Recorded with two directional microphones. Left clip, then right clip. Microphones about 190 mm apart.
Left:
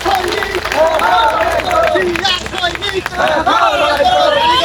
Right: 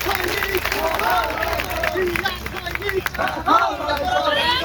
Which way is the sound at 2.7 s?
55° left (ahead or behind).